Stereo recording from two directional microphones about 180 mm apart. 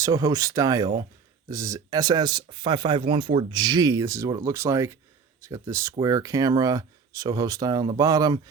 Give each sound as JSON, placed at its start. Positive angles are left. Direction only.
{"t": 0.0, "sound": "speech", "side_deg": -20}